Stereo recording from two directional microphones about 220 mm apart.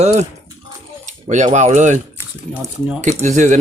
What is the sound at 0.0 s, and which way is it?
Speech, 30° right (ahead or behind).